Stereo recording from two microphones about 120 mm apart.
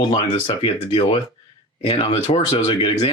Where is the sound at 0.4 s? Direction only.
50° left (ahead or behind).